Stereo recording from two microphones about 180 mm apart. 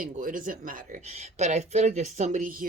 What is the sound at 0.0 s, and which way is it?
Speech, 50° right (ahead or behind).